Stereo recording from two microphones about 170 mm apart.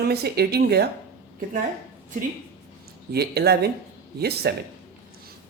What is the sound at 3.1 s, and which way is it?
Speech, 70° right (ahead or behind).